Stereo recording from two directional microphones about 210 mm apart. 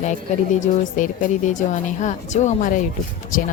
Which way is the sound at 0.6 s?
40° left (ahead or behind).